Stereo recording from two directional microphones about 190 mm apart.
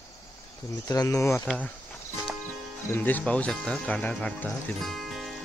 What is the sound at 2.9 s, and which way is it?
Speech, 10° left (ahead or behind).